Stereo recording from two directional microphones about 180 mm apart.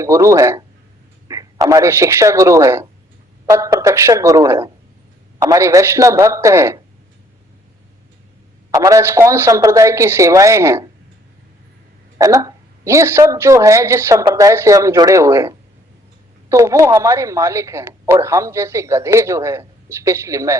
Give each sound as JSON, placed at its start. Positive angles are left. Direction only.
{"t": 0.0, "sound": "speech", "side_deg": -15}
{"t": 8.7, "sound": "speech", "side_deg": -20}
{"t": 12.1, "sound": "speech", "side_deg": -20}